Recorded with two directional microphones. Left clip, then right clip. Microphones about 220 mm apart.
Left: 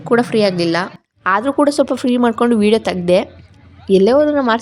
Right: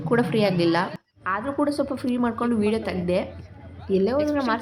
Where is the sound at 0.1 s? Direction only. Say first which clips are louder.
Left 8 dB; 25° left (ahead or behind).